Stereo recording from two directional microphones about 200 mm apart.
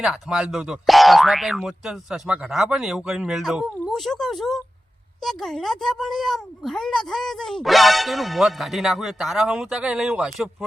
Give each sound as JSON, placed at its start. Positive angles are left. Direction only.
{"t": 0.0, "sound": "speech", "side_deg": -5}